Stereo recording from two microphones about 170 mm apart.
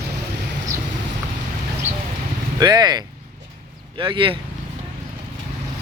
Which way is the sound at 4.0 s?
25° right (ahead or behind).